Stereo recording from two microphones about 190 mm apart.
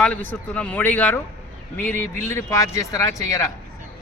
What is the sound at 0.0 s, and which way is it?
A man's voice, 10° left (ahead or behind).